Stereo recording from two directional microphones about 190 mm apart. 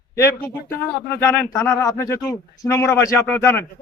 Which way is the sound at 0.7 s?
10° left (ahead or behind).